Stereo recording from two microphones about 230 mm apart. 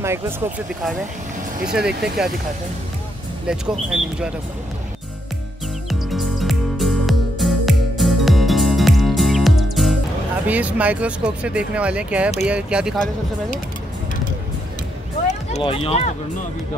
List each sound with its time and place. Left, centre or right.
0.0 s speech: centre
1.7 s speech: centre
3.4 s speech: centre
5.9 s music: centre
10.4 s speech: centre
15.5 s speech: left